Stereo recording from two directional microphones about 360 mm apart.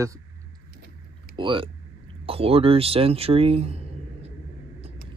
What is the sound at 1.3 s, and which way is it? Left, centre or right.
Speech, centre.